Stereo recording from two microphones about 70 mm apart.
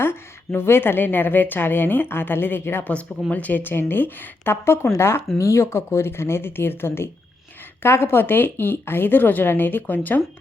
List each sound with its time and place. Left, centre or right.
0.0 s a woman's voice: left
2.9 s a woman's voice: centre